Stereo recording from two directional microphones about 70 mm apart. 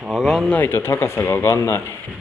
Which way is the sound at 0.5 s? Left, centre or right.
Left.